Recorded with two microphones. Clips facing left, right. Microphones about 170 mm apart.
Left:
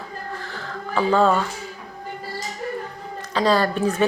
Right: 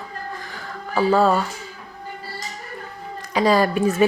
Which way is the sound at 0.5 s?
5° right (ahead or behind).